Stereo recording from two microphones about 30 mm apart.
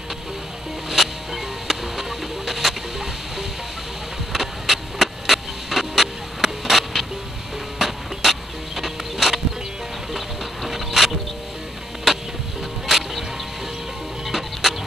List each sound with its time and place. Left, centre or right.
0.8 s music: centre
4.3 s vehicle: centre
7.8 s music: centre
12.1 s a sound: centre
12.8 s music: centre
14.2 s music: centre